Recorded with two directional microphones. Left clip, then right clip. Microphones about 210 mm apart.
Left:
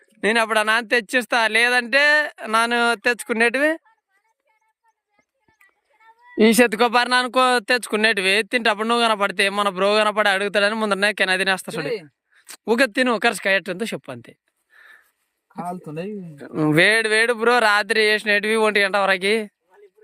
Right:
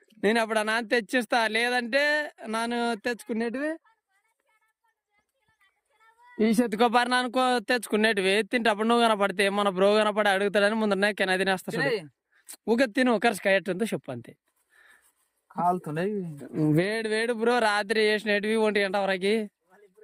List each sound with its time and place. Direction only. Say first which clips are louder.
0.0 s speech: left 6 dB; 5° right (ahead or behind)
3.5 s speech: left 12 dB; 30° left (ahead or behind)
6.7 s speech: left 5 dB; 10° right (ahead or behind)
14.8 s a sound: left 9 dB; 10° right (ahead or behind)
15.5 s speech: right 4 dB; 10° right (ahead or behind)